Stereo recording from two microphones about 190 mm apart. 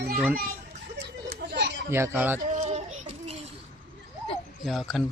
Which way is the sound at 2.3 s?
40° right (ahead or behind).